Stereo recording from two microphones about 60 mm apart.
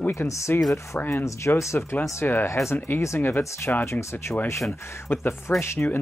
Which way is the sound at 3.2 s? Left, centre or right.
Left.